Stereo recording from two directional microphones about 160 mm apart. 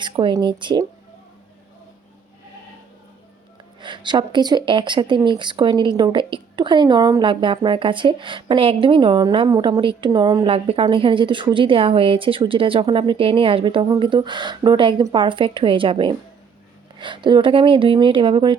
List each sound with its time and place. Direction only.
0.0 s a woman's voice: 30° right (ahead or behind)
3.8 s a woman's voice: 30° right (ahead or behind)